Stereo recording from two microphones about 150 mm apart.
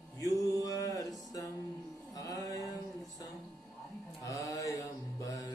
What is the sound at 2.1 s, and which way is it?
Music, 20° left (ahead or behind).